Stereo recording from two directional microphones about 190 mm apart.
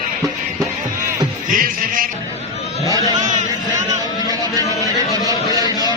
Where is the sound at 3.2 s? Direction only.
40° right (ahead or behind).